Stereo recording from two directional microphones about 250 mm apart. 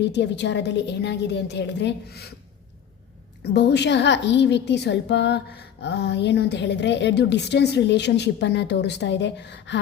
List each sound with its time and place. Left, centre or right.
0.0 s a woman's voice: left
3.4 s a woman's voice: left